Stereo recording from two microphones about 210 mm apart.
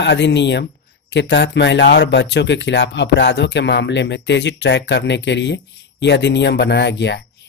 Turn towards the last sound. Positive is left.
turn(degrees=55)  # may be behind; listen again after turning